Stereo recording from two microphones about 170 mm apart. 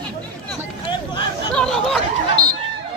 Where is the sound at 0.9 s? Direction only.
25° left (ahead or behind).